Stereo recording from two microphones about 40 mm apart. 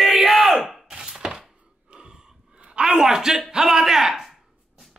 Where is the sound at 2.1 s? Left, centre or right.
Centre.